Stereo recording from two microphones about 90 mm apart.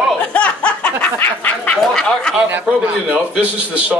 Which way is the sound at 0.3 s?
15° left (ahead or behind).